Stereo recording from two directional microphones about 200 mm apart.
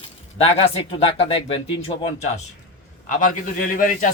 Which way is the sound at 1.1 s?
30° left (ahead or behind).